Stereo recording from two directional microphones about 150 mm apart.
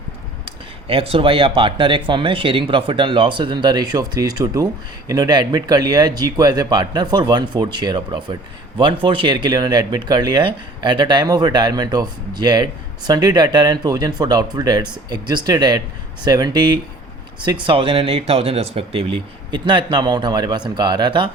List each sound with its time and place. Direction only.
0.9 s speech: 40° right (ahead or behind)